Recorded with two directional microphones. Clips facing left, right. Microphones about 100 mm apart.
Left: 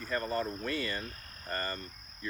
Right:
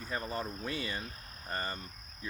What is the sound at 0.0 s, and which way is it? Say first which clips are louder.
Speech: left 4 dB; 10° right (ahead or behind).